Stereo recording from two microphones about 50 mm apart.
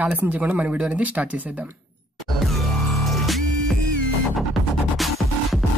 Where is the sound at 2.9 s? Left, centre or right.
Centre.